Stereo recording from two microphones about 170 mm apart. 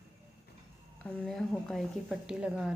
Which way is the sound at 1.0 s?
5° left (ahead or behind).